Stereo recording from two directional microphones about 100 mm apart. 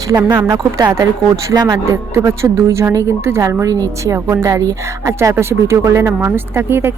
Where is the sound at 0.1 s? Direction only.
45° right (ahead or behind).